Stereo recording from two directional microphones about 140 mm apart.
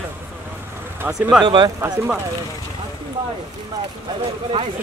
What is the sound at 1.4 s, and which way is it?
Speech, 35° right (ahead or behind).